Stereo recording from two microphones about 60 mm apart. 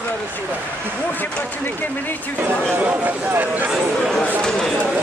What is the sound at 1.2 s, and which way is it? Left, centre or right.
Vehicle, left.